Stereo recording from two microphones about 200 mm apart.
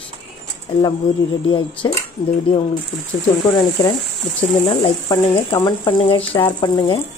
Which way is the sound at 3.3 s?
25° left (ahead or behind).